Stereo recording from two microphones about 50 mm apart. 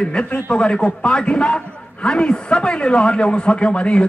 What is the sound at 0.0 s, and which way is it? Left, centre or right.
A man's voice, centre.